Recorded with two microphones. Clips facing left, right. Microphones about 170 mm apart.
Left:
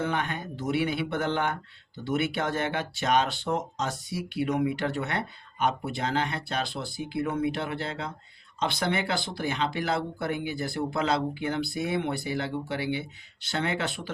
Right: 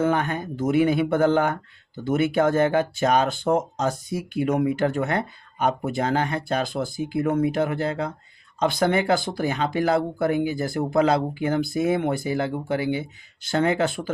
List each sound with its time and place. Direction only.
0.0 s speech: 45° right (ahead or behind)